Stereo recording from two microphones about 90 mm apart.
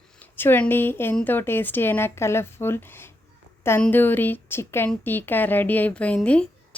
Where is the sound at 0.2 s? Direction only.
20° left (ahead or behind).